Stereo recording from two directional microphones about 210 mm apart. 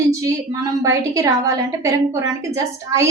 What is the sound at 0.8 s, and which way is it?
A woman's voice, 15° right (ahead or behind).